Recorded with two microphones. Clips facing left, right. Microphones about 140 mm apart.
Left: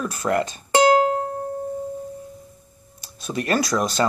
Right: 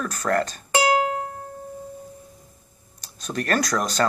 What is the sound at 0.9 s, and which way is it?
Music, 30° left (ahead or behind).